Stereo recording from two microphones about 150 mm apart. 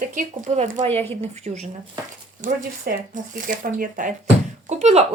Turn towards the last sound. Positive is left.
turn(degrees=-50)  # may be behind; listen again after turning